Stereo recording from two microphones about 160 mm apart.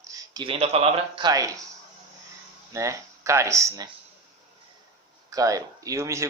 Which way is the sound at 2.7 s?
20° right (ahead or behind).